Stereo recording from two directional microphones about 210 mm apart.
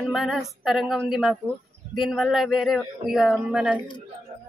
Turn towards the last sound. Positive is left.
turn(degrees=-5)  # may be behind; listen again after turning